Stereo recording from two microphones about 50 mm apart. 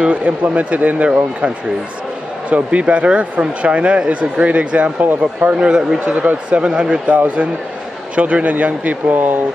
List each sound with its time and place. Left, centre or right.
0.0 s speech: right
2.5 s speech: right
5.7 s a man's voice: centre
5.9 s speech: right
8.2 s speech: right